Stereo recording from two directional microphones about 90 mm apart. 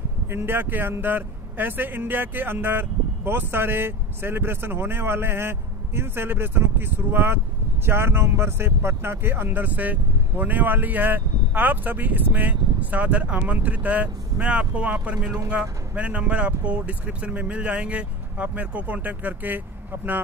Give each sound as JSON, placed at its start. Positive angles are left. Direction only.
{"t": 0.3, "sound": "speech", "side_deg": -25}